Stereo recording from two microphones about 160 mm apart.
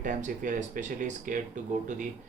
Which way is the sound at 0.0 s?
55° right (ahead or behind).